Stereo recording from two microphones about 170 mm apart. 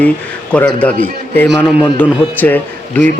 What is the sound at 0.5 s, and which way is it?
Speech, 5° left (ahead or behind).